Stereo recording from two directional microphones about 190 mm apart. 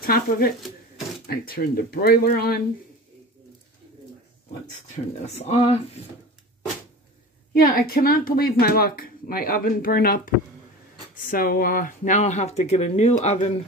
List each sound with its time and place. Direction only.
0.0 s speech: 50° left (ahead or behind)
4.9 s speech: 35° left (ahead or behind)
7.5 s speech: 50° left (ahead or behind)